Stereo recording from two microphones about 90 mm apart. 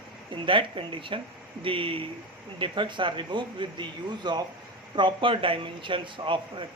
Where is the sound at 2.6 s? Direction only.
60° right (ahead or behind).